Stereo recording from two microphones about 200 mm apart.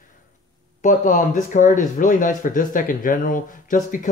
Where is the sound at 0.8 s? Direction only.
40° left (ahead or behind).